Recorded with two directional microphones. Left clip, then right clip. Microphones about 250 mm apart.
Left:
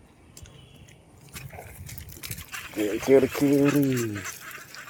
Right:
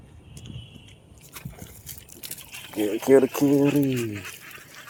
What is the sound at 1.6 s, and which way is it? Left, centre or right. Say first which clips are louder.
Liquid: left 2 dB; right.